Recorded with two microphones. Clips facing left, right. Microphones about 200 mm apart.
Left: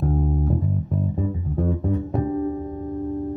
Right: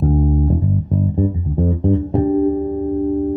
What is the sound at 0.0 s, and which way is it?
Bass guitar, centre (ahead or behind).